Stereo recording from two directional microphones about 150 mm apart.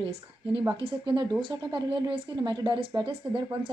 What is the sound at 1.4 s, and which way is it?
A woman's voice, 30° right (ahead or behind).